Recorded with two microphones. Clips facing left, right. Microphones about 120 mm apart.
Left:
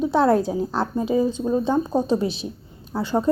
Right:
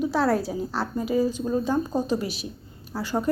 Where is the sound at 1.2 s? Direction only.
20° left (ahead or behind).